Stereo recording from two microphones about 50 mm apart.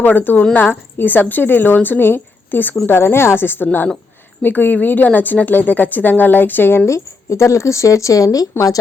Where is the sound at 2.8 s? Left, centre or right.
Left.